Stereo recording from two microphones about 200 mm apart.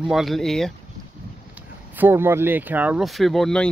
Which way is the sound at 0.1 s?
Centre (ahead or behind).